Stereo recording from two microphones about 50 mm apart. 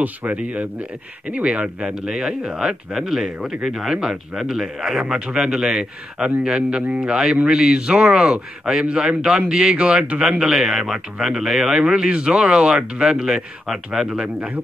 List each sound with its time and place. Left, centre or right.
0.0 s speech: right
2.0 s speech: centre
10.4 s speech: centre